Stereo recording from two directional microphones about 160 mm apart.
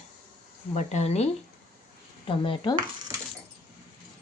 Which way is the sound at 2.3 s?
30° left (ahead or behind).